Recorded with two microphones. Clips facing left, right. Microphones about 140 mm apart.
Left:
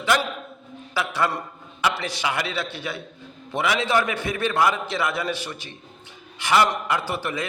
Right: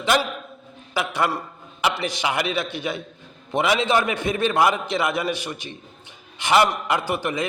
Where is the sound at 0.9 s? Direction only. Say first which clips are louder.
Right 1 dB; 15° right (ahead or behind).